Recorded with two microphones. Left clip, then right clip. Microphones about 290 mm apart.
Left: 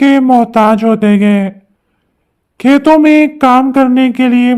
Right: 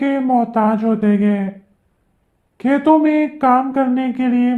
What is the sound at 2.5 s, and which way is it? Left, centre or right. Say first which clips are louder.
A man's voice: left 6 dB; left.